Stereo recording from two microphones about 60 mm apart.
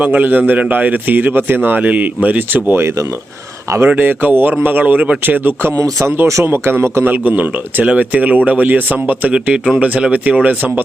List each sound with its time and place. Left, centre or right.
0.0 s speech: right
2.8 s speech: right
3.8 s speech: right
5.7 s speech: right
6.4 s speech: right
9.3 s speech: centre; by 10.8 s right